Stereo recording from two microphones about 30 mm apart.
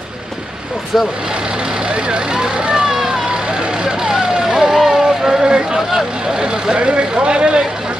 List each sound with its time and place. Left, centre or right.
0.9 s speech: centre
2.0 s speech: right
2.7 s vehicle: centre
4.8 s a sound: centre
6.4 s speech: right